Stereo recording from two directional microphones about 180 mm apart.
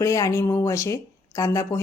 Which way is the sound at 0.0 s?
15° left (ahead or behind).